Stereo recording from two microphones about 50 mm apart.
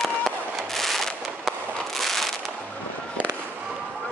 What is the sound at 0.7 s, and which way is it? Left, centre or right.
Fireworks, centre.